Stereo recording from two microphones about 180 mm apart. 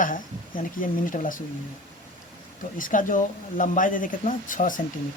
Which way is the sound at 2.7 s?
50° left (ahead or behind).